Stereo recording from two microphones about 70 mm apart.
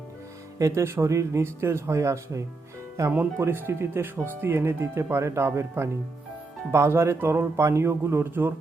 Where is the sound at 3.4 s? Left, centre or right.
Right.